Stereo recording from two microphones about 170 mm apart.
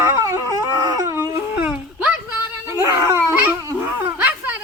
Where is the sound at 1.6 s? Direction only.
5° right (ahead or behind).